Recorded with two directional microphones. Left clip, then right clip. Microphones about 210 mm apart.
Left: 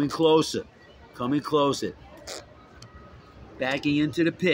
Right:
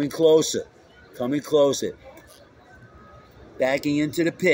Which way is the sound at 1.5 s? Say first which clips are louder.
Right 5 dB; 25° left (ahead or behind).